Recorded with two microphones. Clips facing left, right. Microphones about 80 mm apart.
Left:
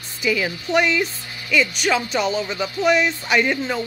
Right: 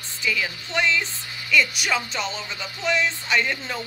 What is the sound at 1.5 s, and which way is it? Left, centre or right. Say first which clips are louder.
Speech: left 3 dB; centre.